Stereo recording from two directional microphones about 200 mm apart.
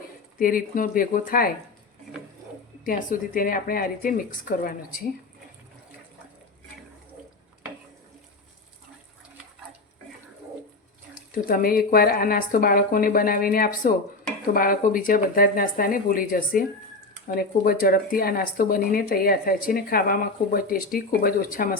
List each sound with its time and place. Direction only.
0.3 s speech: 45° left (ahead or behind)
2.8 s speech: 40° left (ahead or behind)
11.3 s speech: 45° left (ahead or behind)